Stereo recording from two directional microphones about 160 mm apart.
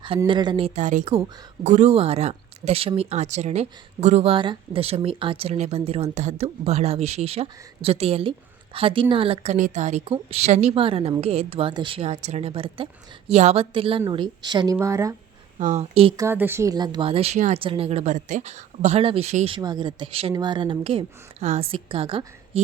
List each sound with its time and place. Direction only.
0.3 s a woman's voice: 30° right (ahead or behind)
15.5 s speech: 45° right (ahead or behind)
16.1 s a woman's voice: 15° right (ahead or behind); by 19.5 s 45° right (ahead or behind)
19.5 s speech: 25° right (ahead or behind)